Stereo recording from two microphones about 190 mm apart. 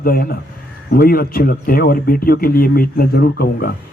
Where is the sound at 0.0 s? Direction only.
50° left (ahead or behind).